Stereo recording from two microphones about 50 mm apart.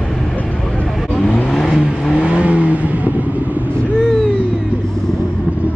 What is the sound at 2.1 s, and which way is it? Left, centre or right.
Vehicle, right.